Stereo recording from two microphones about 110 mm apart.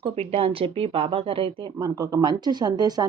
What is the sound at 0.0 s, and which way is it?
Speech, 65° right (ahead or behind).